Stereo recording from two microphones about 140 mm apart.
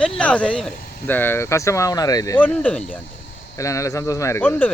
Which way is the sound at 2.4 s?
10° left (ahead or behind).